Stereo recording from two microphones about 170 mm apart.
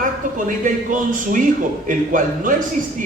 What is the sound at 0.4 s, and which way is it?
Speech, 50° right (ahead or behind).